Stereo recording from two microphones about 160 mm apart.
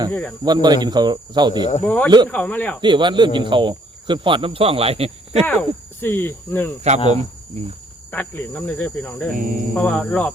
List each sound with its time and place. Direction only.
0.1 s speech: 5° left (ahead or behind)
0.4 s speech: 25° right (ahead or behind)
1.8 s speech: 10° left (ahead or behind)
2.0 s speech: 25° right (ahead or behind)
2.3 s speech: 10° left (ahead or behind)
2.8 s speech: 30° right (ahead or behind)
5.5 s speech: 10° left (ahead or behind)
6.9 s speech: 45° right (ahead or behind)
8.1 s speech: 10° left (ahead or behind)
9.3 s speech: 60° right (ahead or behind)
9.7 s speech: 5° left (ahead or behind)